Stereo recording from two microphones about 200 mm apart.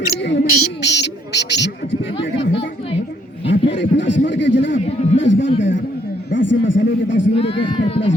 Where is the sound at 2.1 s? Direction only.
25° left (ahead or behind).